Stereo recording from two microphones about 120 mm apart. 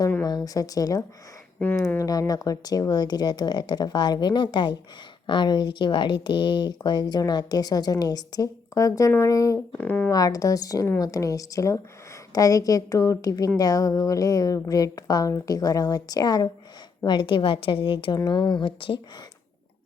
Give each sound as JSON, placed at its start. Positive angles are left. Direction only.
{"t": 0.3, "sound": "speech", "side_deg": 30}
{"t": 1.5, "sound": "speech", "side_deg": 10}
{"t": 2.0, "sound": "speech", "side_deg": 30}
{"t": 9.7, "sound": "speech", "side_deg": 10}
{"t": 10.1, "sound": "a woman's voice", "side_deg": 30}